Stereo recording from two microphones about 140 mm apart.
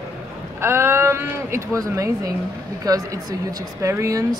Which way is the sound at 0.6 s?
20° right (ahead or behind).